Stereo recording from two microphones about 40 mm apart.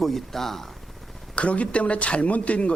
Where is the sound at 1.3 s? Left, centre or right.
Left.